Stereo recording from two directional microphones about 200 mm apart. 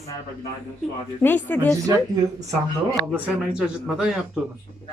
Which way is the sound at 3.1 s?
5° right (ahead or behind).